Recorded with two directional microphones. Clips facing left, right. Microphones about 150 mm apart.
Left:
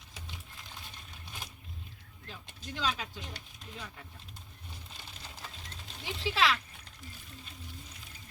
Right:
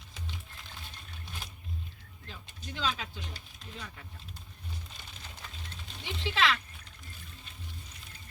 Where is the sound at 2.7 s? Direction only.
10° left (ahead or behind).